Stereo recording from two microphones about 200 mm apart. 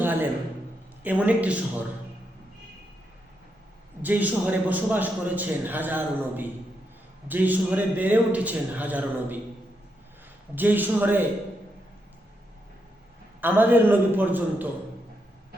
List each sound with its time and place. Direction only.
0.0 s a sound: 10° right (ahead or behind)
1.0 s a man's voice: 5° right (ahead or behind)
4.0 s a man's voice: 10° right (ahead or behind)
10.5 s a man's voice: 10° right (ahead or behind)
13.4 s a man's voice: 10° right (ahead or behind)